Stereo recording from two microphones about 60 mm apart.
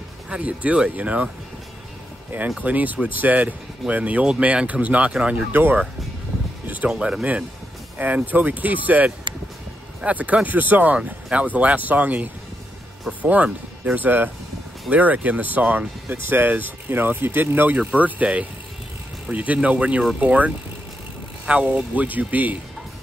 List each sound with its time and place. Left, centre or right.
0.3 s speech: centre
2.6 s speech: right
6.9 s speech: centre